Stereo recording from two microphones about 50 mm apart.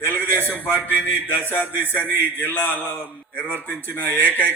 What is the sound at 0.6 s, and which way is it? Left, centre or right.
A man's voice, left.